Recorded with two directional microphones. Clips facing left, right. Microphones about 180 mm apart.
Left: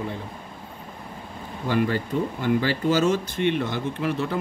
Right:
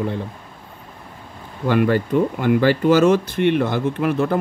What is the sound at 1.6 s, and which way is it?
Speech, 65° right (ahead or behind).